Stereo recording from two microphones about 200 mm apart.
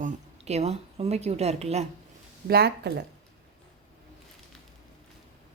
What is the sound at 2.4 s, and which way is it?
Speech, 50° right (ahead or behind).